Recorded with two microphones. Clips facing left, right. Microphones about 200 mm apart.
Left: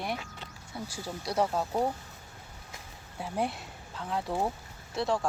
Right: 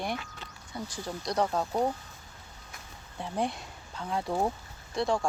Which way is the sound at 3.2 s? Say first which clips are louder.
Even; 5° left (ahead or behind).